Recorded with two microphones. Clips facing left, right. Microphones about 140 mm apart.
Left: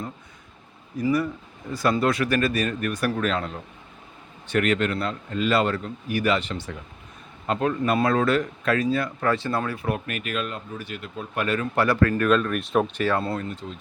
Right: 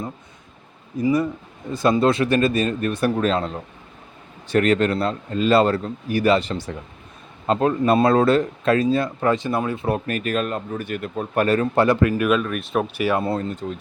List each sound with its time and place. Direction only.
0.9 s speech: 20° right (ahead or behind)
13.4 s speech: 45° right (ahead or behind)